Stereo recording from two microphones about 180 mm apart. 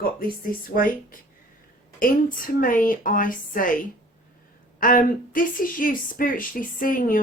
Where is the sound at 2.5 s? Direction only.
50° left (ahead or behind).